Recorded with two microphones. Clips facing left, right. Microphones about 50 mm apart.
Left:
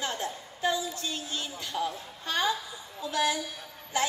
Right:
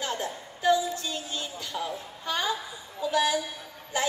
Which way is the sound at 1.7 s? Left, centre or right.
Right.